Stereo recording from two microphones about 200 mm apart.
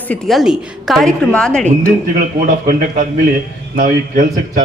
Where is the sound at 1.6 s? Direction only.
40° right (ahead or behind).